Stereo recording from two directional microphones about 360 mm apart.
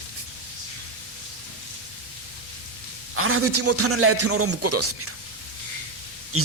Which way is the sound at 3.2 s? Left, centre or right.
Right.